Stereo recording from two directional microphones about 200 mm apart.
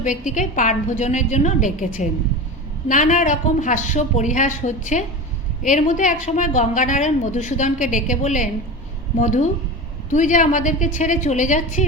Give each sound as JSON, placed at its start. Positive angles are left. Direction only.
{"t": 0.0, "sound": "a woman's voice", "side_deg": 40}